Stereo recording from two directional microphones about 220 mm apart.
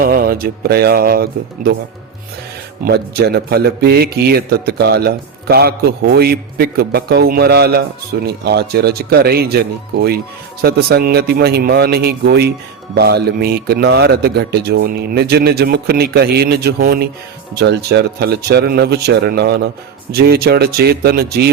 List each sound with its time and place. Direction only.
0.0 s a man's voice: 40° right (ahead or behind)
2.8 s a man's voice: 45° right (ahead or behind)